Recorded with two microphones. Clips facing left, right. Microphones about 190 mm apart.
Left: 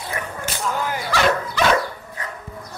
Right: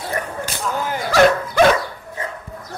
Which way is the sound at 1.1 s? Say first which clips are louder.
Right 7 dB; 50° right (ahead or behind).